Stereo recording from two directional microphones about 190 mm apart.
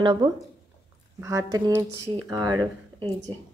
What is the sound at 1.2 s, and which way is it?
Speech, 15° right (ahead or behind).